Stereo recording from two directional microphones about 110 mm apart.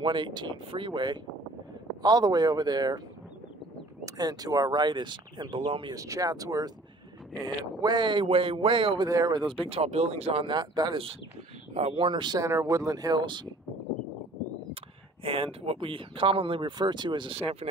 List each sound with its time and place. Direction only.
0.0 s speech: 45° right (ahead or behind)
4.0 s speech: 35° right (ahead or behind); by 5.9 s 50° right (ahead or behind)
5.9 s speech: 30° right (ahead or behind)
7.8 s speech: 45° right (ahead or behind)
9.0 s speech: 35° right (ahead or behind)
9.7 s speech: 65° right (ahead or behind); by 11.1 s 50° right (ahead or behind)
11.7 s speech: 60° right (ahead or behind); by 12.4 s 45° right (ahead or behind)
12.4 s speech: 30° right (ahead or behind)
15.2 s speech: 55° right (ahead or behind)